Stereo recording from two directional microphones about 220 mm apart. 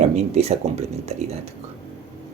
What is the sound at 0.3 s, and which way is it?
Speech, 30° right (ahead or behind).